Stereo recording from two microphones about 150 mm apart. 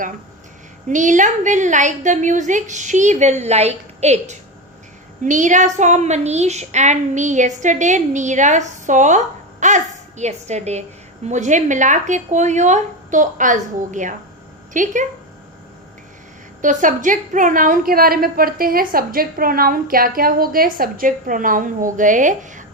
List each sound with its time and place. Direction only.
0.9 s a woman's voice: 55° right (ahead or behind)
16.6 s a woman's voice: 60° right (ahead or behind)